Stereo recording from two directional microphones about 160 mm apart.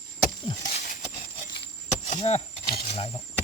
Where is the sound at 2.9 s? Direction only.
35° left (ahead or behind).